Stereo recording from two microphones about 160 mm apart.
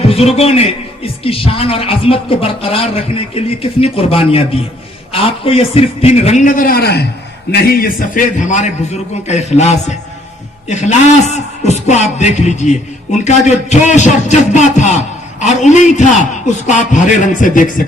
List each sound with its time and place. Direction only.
0.1 s a man's voice: 40° left (ahead or behind); by 7.1 s 85° left
7.5 s a man's voice: 75° left (ahead or behind); by 17.8 s 55° left (ahead or behind)